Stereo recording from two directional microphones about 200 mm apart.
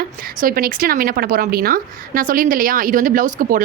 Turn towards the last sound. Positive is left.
turn(degrees=-40)  # may be behind; listen again after turning